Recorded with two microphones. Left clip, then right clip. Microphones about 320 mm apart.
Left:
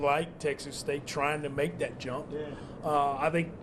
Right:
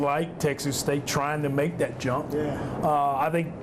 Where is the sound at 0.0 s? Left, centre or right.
Right.